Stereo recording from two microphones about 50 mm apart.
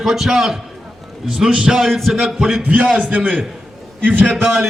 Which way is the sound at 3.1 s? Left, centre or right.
Right.